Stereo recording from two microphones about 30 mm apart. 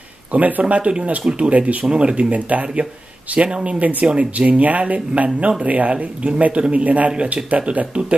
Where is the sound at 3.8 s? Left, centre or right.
Right.